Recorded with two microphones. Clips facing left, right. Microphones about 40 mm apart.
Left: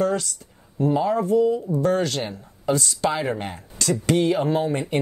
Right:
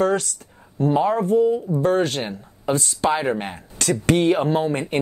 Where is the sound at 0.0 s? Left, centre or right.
Right.